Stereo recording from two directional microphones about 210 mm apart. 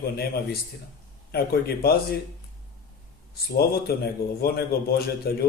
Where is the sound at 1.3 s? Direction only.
50° left (ahead or behind).